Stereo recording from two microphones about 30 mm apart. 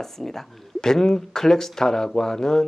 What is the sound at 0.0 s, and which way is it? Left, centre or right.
Speech, centre.